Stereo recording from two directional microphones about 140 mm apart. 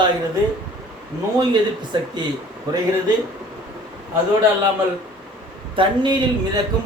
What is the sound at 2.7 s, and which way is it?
Speech, 30° right (ahead or behind).